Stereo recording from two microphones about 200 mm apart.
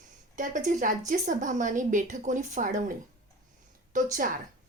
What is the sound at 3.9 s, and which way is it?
Speech, 40° right (ahead or behind).